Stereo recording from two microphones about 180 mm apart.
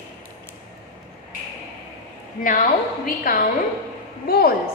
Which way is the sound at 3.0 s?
55° left (ahead or behind).